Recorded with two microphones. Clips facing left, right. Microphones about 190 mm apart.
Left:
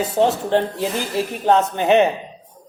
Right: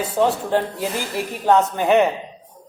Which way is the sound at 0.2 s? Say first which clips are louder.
Left 1 dB; 25° left (ahead or behind).